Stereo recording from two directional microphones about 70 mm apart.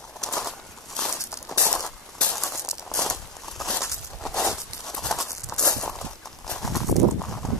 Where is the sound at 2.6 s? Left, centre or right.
Left.